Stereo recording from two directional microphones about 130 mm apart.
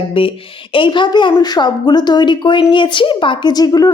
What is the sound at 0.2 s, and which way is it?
A woman's voice, 45° left (ahead or behind).